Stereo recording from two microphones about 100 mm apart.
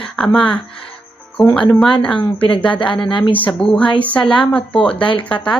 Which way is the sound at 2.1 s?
55° left (ahead or behind).